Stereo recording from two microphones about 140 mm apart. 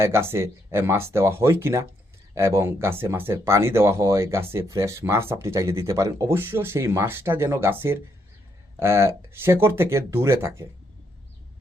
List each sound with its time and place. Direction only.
0.0 s speech: 20° right (ahead or behind)